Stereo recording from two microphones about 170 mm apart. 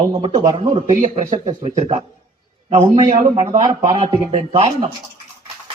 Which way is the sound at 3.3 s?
30° right (ahead or behind).